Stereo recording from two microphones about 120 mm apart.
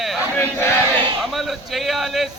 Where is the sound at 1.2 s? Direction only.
Centre (ahead or behind).